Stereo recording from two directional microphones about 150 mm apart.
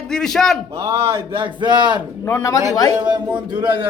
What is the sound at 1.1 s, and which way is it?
Speech, 35° right (ahead or behind).